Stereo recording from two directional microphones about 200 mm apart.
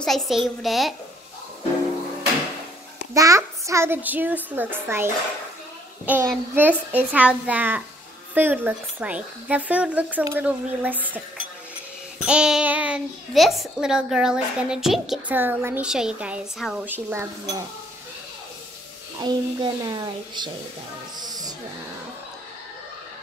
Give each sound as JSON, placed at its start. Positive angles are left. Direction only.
{"t": 0.0, "sound": "a child's voice", "side_deg": 0}
{"t": 3.2, "sound": "speech", "side_deg": -15}
{"t": 12.3, "sound": "a child's voice", "side_deg": -5}
{"t": 19.1, "sound": "a woman's voice", "side_deg": -20}
{"t": 21.2, "sound": "a sound", "side_deg": -20}